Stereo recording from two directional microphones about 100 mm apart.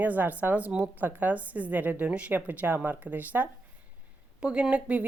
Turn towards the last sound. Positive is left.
turn(degrees=-10)  # may be behind; listen again after turning